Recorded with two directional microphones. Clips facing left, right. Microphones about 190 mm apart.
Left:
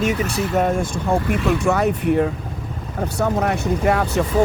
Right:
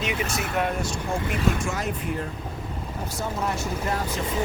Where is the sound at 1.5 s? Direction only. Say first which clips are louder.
Left 10 dB; 65° left (ahead or behind).